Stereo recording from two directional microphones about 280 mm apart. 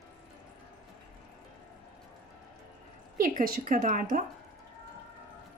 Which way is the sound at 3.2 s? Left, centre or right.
Right.